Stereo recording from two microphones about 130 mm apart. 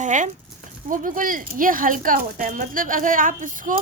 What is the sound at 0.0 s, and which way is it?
Speech, 70° right (ahead or behind).